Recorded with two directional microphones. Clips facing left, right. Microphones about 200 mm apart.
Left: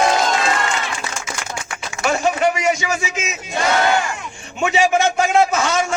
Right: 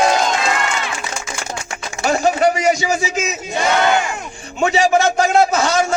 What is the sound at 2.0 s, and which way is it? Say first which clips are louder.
A man's voice: right 2 dB; 35° right (ahead or behind).